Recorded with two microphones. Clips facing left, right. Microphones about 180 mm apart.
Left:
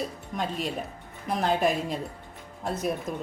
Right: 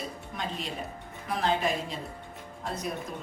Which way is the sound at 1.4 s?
50° left (ahead or behind).